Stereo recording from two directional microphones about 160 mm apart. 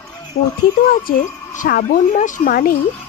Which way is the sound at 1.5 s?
60° left (ahead or behind).